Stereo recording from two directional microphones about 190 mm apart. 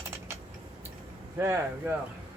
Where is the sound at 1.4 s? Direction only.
15° right (ahead or behind).